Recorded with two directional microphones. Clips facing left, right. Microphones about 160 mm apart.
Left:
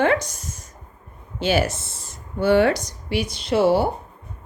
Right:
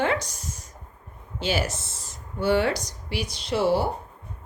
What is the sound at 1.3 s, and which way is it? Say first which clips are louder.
A woman's voice: left 6 dB; 55° left (ahead or behind).